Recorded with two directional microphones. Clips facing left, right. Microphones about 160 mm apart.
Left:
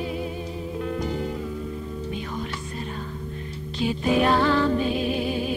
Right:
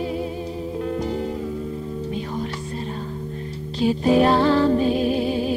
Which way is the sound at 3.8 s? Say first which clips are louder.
Right 5 dB; 35° right (ahead or behind).